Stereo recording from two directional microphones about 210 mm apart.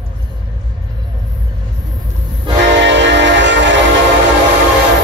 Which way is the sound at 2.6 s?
60° right (ahead or behind).